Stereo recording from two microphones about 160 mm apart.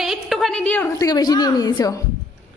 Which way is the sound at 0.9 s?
25° left (ahead or behind).